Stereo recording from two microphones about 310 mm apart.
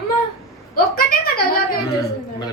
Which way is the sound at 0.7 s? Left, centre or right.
Left.